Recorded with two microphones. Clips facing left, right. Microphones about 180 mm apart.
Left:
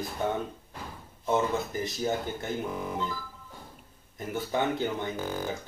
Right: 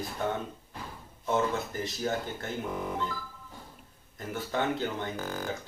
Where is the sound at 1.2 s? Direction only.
15° left (ahead or behind).